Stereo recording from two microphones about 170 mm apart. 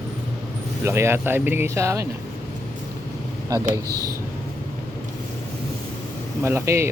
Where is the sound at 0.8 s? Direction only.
15° right (ahead or behind).